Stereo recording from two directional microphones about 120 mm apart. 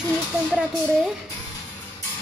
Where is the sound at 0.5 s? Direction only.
10° left (ahead or behind).